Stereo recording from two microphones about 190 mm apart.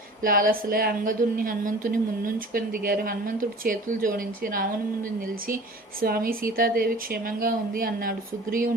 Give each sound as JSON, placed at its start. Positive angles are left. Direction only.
{"t": 0.2, "sound": "a woman's voice", "side_deg": -45}
{"t": 6.0, "sound": "a woman's voice", "side_deg": -50}